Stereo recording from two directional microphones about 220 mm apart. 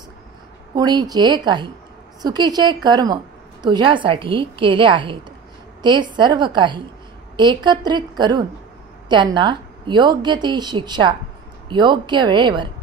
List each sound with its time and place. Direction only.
0.7 s a woman's voice: 20° right (ahead or behind)